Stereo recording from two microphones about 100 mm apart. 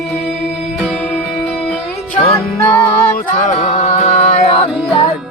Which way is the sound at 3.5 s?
90° left.